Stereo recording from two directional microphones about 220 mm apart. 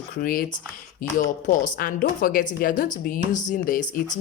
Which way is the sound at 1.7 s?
40° left (ahead or behind).